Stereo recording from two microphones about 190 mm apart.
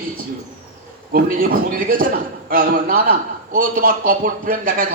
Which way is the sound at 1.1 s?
50° right (ahead or behind).